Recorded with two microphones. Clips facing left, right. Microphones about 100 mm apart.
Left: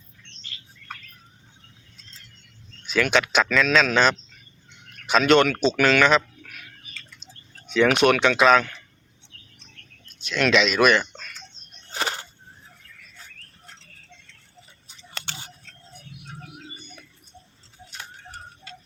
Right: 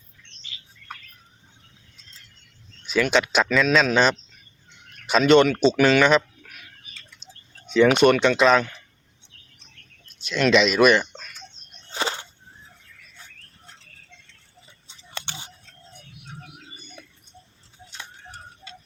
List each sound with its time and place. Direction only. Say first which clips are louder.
2.8 s speech: right 1 dB; centre (ahead or behind)
7.9 s speech: right 2 dB; centre (ahead or behind)
8.1 s speech: right 1 dB; 90° left
10.1 s speech: right 2 dB; centre (ahead or behind)
11.9 s a sound: right 1 dB; 25° right (ahead or behind)
14.8 s scissors: right 1 dB; 20° right (ahead or behind)